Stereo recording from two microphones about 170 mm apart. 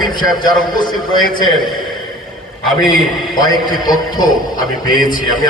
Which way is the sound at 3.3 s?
25° left (ahead or behind).